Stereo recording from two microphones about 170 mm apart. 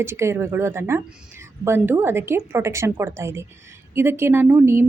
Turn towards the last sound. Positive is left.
turn(degrees=-15)  # may be behind; listen again after turning